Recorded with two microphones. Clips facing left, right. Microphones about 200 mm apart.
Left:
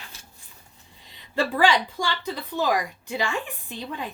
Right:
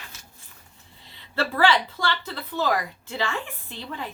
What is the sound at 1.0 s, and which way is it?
A woman's voice, 15° left (ahead or behind).